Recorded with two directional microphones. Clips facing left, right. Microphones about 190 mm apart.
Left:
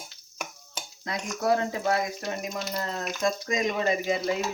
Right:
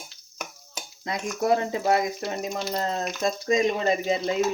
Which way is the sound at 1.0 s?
20° right (ahead or behind).